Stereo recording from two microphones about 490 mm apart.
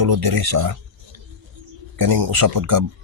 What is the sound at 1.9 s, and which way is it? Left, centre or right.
Speech, right.